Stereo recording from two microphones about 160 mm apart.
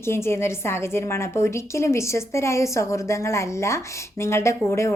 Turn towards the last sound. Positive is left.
turn(degrees=15)  # may be behind; listen again after turning